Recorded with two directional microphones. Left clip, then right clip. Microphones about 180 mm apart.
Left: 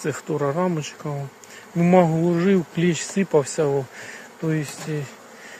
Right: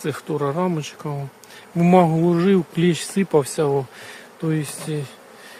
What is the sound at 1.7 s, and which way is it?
Speech, 30° right (ahead or behind).